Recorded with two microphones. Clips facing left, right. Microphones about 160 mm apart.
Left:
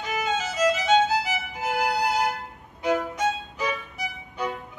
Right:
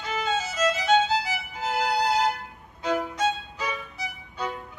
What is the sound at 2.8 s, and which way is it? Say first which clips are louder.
Violin: left 2 dB; 15° left (ahead or behind).